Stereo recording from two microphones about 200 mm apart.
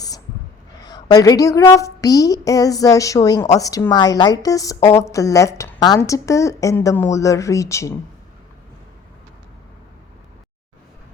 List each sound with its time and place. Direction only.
0.9 s a woman's voice: 20° left (ahead or behind)